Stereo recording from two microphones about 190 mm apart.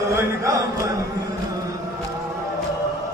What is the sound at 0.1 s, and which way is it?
Chant, 15° right (ahead or behind).